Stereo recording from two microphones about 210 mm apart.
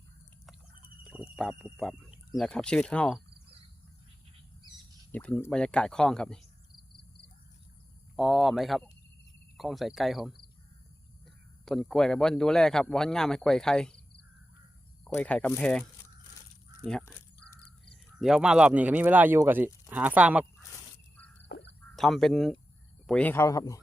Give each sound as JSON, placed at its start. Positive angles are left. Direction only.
{"t": 1.0, "sound": "speech", "side_deg": 0}
{"t": 5.1, "sound": "speech", "side_deg": 5}
{"t": 8.1, "sound": "speech", "side_deg": 0}
{"t": 11.6, "sound": "speech", "side_deg": 0}
{"t": 15.0, "sound": "speech", "side_deg": 5}
{"t": 21.5, "sound": "a sound", "side_deg": 50}
{"t": 21.9, "sound": "speech", "side_deg": 0}